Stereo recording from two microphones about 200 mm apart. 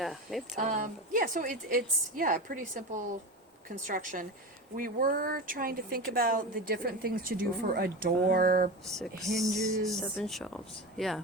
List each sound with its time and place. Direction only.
0.0 s speech: centre (ahead or behind)
0.5 s speech: 40° right (ahead or behind)
8.9 s speech: centre (ahead or behind)